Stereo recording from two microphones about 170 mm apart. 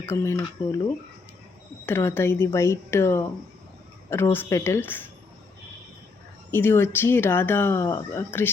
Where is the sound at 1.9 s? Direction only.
15° left (ahead or behind).